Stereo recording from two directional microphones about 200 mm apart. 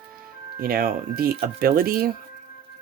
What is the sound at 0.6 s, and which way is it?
Speech, 45° right (ahead or behind).